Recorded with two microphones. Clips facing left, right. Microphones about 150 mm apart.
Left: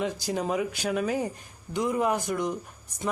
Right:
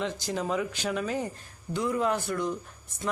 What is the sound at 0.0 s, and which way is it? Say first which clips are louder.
Speech: left 2 dB; 10° left (ahead or behind).